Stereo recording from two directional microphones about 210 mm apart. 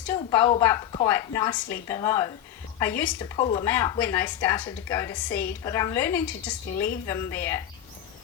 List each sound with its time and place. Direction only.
0.2 s speech: 20° left (ahead or behind)